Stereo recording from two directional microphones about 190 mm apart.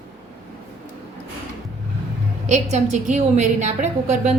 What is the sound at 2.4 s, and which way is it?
A woman's voice, 40° right (ahead or behind).